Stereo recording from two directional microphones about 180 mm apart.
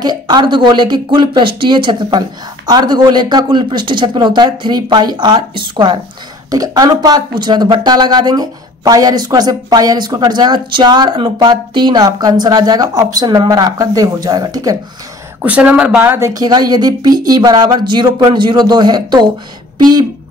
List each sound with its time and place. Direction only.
0.0 s speech: 25° right (ahead or behind)
15.4 s speech: 10° right (ahead or behind)